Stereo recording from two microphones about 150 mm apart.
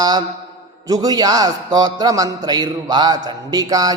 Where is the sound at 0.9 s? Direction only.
25° right (ahead or behind).